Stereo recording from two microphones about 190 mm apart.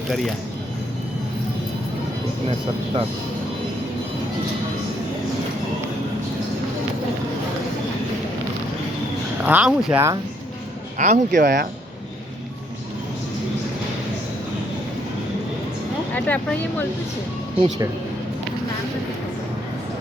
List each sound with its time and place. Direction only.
2.5 s speech: 30° right (ahead or behind)
9.4 s speech: 10° right (ahead or behind)
10.9 s speech: 40° right (ahead or behind)
11.3 s speech: 60° right (ahead or behind)
16.1 s speech: 10° left (ahead or behind)